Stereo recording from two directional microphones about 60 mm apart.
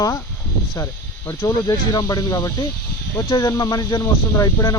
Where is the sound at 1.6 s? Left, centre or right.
Left.